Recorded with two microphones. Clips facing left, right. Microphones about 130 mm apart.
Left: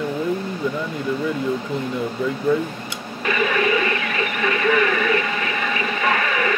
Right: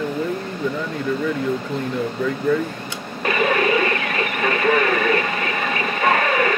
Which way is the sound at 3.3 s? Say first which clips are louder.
Right 1 dB; 40° right (ahead or behind).